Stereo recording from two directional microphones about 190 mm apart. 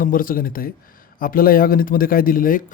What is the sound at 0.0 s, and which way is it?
Speech, 50° left (ahead or behind).